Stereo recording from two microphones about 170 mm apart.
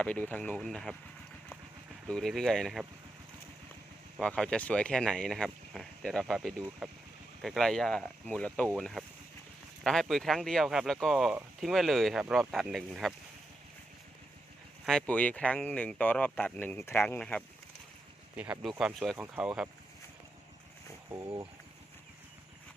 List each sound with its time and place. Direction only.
0.0 s speech: 10° left (ahead or behind)
2.0 s speech: 5° left (ahead or behind)
4.2 s speech: 5° left (ahead or behind)
14.8 s speech: 5° left (ahead or behind)
18.3 s speech: 5° right (ahead or behind)
21.1 s speech: 20° right (ahead or behind)